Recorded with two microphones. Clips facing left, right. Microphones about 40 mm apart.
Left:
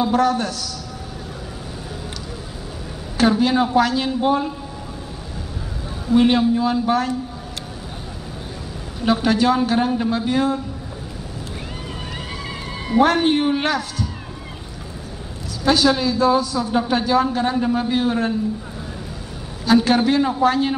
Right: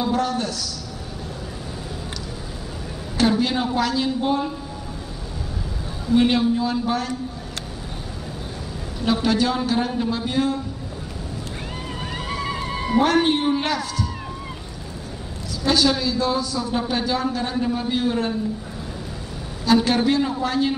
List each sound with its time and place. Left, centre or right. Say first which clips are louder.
0.1 s a man's voice: left 4 dB; left
3.2 s a man's voice: left 3 dB; left
6.0 s a man's voice: left 2 dB; left
9.0 s a man's voice: left 3 dB; left
13.0 s a man's voice: left 3 dB; left
15.6 s a man's voice: left 3 dB; left
19.6 s a man's voice: left 2 dB; left